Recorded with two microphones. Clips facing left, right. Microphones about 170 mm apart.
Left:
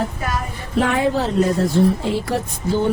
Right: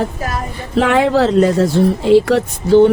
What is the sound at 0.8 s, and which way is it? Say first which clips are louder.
Speech: right 6 dB; 90° right.